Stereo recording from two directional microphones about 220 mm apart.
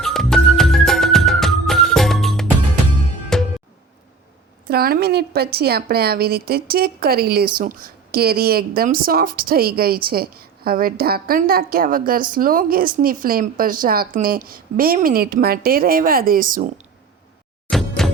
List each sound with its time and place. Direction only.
0.0 s music: centre (ahead or behind)
4.7 s speech: 45° right (ahead or behind)
17.7 s a sound: centre (ahead or behind)